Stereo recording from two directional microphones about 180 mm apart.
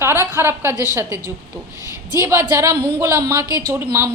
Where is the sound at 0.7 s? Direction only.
20° left (ahead or behind).